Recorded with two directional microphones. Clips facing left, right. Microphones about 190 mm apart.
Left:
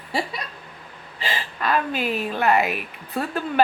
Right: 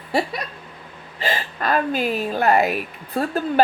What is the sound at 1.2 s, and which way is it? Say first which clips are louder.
A woman's voice: right 3 dB; 45° right (ahead or behind).